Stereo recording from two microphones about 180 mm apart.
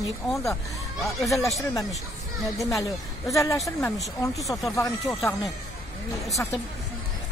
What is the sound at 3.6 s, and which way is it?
Speech, 15° left (ahead or behind).